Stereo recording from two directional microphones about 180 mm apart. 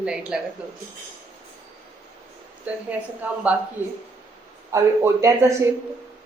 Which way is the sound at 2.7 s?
10° right (ahead or behind).